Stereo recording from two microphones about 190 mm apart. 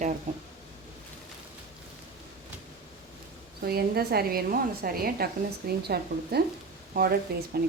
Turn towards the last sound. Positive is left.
turn(degrees=-55)  # may be behind; listen again after turning